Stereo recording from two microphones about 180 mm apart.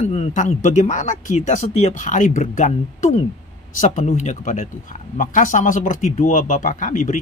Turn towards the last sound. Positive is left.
turn(degrees=45)  # may be behind; listen again after turning